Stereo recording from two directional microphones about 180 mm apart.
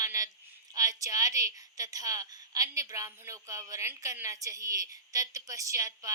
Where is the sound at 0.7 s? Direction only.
20° right (ahead or behind).